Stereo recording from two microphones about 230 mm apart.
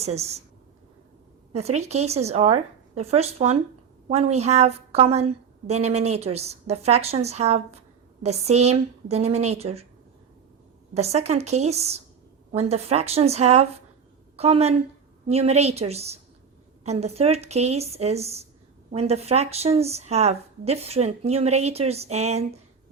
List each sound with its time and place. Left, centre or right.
0.0 s a woman's voice: right
1.5 s a woman's voice: right
10.9 s a woman's voice: right